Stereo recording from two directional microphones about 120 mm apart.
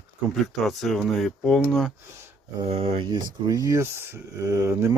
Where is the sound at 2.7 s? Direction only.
50° right (ahead or behind).